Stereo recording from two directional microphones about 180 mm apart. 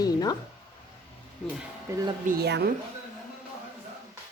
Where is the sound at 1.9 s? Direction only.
15° right (ahead or behind).